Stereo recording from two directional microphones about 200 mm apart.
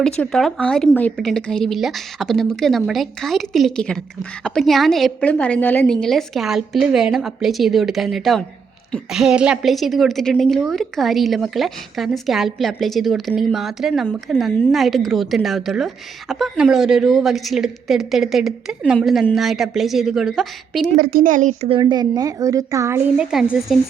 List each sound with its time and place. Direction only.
0.0 s a woman's voice: 5° left (ahead or behind)
21.0 s speech: 45° right (ahead or behind)
21.7 s a woman's voice: 20° right (ahead or behind); by 23.7 s centre (ahead or behind)